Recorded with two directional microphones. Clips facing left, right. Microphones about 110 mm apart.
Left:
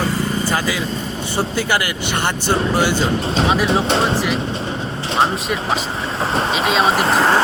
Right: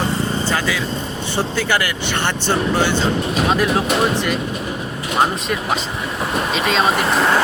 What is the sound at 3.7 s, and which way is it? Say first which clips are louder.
Speech: left 1 dB; 30° left (ahead or behind).